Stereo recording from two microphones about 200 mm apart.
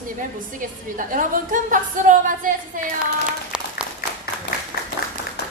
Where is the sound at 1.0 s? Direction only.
40° right (ahead or behind).